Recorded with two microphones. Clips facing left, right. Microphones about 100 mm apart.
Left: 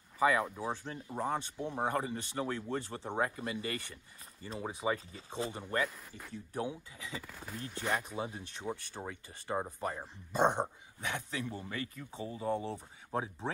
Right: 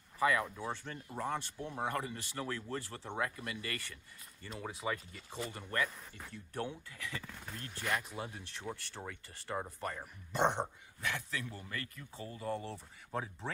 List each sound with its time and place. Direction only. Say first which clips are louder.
0.2 s speech: left 3 dB; 25° left (ahead or behind)
6.5 s speech: left 3 dB; 10° left (ahead or behind)
7.2 s speech: left 3 dB; 10° left (ahead or behind)